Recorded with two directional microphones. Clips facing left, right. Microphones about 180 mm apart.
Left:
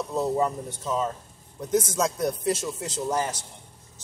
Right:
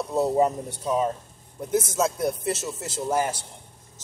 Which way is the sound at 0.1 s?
20° right (ahead or behind).